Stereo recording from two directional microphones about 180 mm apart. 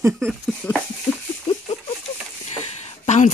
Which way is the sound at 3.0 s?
40° left (ahead or behind).